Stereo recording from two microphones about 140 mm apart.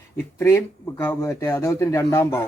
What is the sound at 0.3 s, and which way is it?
Speech, 15° left (ahead or behind).